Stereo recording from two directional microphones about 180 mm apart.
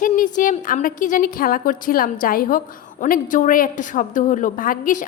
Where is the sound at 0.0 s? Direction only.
45° left (ahead or behind).